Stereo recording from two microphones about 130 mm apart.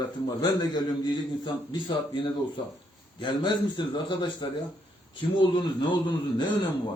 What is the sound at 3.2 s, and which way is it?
A man's voice, 35° left (ahead or behind).